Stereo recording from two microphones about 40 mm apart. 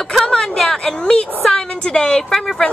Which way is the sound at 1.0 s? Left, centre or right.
Left.